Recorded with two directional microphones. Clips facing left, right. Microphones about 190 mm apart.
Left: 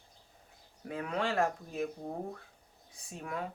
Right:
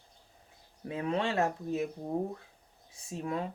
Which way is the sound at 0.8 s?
25° right (ahead or behind).